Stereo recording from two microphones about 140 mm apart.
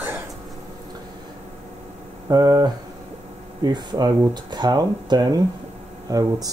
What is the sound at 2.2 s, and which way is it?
Speech, 25° right (ahead or behind).